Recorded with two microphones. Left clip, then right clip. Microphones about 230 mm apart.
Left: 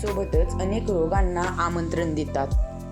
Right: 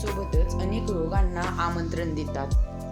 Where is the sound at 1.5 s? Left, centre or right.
Centre.